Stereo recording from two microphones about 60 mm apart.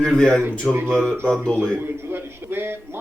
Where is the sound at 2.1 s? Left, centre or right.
Right.